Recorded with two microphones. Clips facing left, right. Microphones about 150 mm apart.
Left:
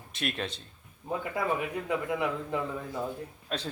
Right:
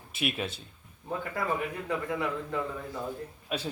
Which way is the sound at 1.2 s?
15° left (ahead or behind).